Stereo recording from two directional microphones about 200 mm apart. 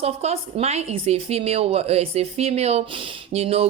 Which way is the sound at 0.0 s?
30° right (ahead or behind).